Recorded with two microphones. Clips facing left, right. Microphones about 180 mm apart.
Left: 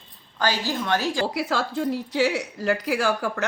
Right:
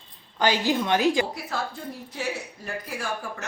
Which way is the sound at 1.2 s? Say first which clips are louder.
Left 6 dB; 90° left.